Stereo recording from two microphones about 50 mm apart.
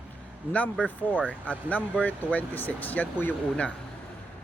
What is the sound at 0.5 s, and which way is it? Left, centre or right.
Speech, left.